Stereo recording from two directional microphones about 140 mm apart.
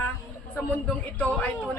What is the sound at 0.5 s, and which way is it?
Speech, 10° left (ahead or behind).